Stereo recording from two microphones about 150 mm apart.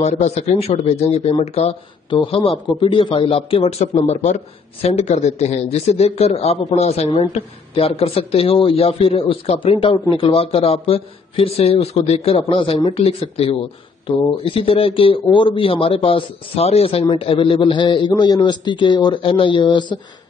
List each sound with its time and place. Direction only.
0.0 s speech: 50° left (ahead or behind); by 20.0 s 30° left (ahead or behind)